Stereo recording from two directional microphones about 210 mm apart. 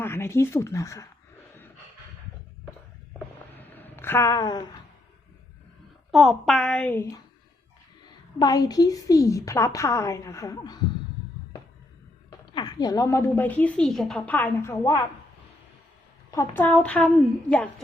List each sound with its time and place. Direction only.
0.0 s speech: 10° left (ahead or behind)
3.5 s a sound: 10° left (ahead or behind)
6.1 s a woman's voice: centre (ahead or behind); by 10.8 s 20° left (ahead or behind)
12.5 s a woman's voice: 20° left (ahead or behind)
16.3 s a woman's voice: 10° left (ahead or behind)